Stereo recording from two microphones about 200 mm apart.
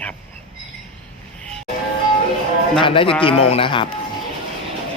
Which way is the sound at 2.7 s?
25° left (ahead or behind).